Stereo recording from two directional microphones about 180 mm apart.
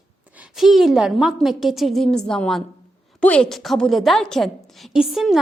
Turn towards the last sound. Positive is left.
turn(degrees=0)  # may be behind; listen again after turning